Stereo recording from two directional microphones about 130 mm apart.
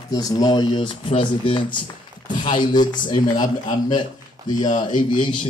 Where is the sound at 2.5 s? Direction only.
35° left (ahead or behind).